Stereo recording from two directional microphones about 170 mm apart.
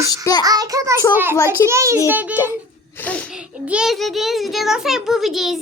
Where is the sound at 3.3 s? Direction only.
5° right (ahead or behind).